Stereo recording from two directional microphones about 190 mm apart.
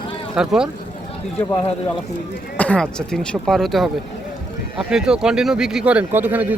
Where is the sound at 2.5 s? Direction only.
5° left (ahead or behind).